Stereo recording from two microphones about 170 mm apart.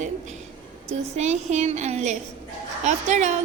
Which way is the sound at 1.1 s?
40° right (ahead or behind).